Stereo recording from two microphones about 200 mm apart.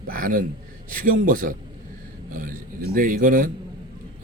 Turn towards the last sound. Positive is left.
turn(degrees=-45)  # may be behind; listen again after turning